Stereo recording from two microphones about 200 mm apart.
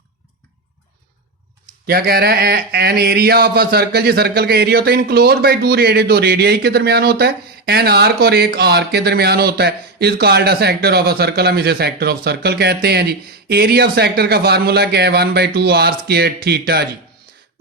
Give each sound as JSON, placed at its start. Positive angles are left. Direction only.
{"t": 1.9, "sound": "speech", "side_deg": -50}